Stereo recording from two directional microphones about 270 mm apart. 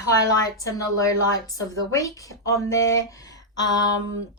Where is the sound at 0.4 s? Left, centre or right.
Centre.